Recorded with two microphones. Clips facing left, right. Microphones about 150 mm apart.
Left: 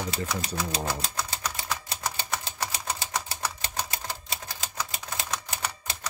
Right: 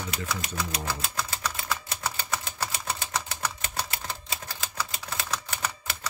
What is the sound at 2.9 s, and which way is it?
Typewriter, 15° left (ahead or behind).